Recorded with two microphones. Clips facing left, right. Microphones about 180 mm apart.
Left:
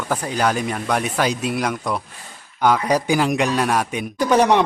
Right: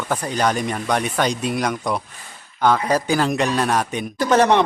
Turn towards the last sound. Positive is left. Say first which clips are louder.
# even
turn(degrees=10)  # may be behind; listen again after turning